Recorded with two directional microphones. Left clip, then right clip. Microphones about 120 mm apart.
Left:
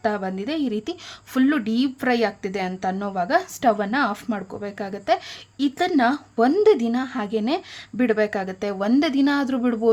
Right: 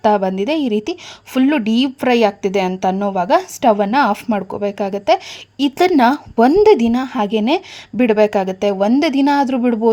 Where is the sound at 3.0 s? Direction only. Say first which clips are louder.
Right 6 dB; 40° right (ahead or behind).